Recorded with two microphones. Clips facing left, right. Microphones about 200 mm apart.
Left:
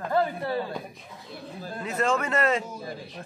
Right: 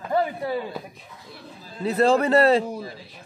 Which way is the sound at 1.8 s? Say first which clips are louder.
Right 7 dB; 35° right (ahead or behind).